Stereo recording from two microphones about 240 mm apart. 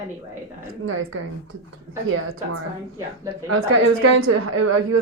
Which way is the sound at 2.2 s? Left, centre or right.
Right.